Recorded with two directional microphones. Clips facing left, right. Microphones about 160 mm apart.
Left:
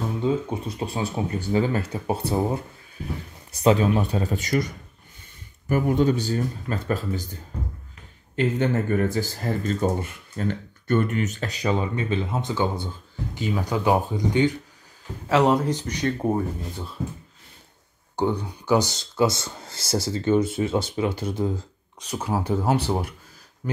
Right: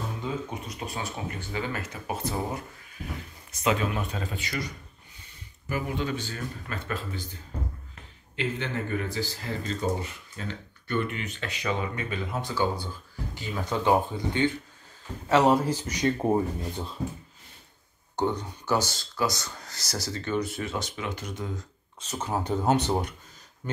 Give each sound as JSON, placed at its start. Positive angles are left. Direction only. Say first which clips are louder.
{"t": 0.2, "sound": "speech", "louder": "left 11 dB", "side_deg": 30}
{"t": 5.7, "sound": "speech", "louder": "left 9 dB", "side_deg": 45}
{"t": 8.4, "sound": "speech", "louder": "left 8 dB", "side_deg": 45}
{"t": 15.2, "sound": "speech", "louder": "left 2 dB", "side_deg": 0}
{"t": 18.1, "sound": "speech", "louder": "left 3 dB", "side_deg": 10}
{"t": 19.1, "sound": "speech", "louder": "left 7 dB", "side_deg": 25}
{"t": 22.0, "sound": "speech", "louder": "left 4 dB", "side_deg": 10}